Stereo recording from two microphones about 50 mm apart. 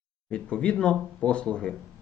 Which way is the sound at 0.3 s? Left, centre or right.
Left.